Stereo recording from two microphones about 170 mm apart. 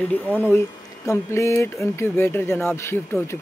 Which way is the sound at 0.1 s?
10° left (ahead or behind).